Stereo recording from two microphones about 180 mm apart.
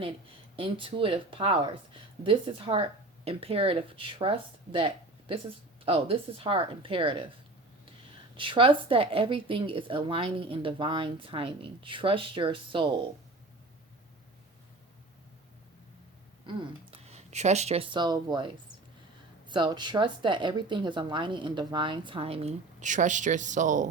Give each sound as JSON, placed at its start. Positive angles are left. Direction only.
{"t": 0.5, "sound": "speech", "side_deg": -30}
{"t": 8.4, "sound": "speech", "side_deg": -30}
{"t": 16.9, "sound": "speech", "side_deg": -35}